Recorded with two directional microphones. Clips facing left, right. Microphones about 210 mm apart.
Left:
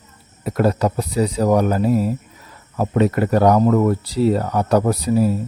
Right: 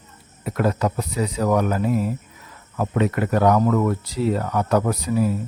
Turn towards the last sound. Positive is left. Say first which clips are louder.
# left 4 dB
turn(degrees=35)  # may be behind; listen again after turning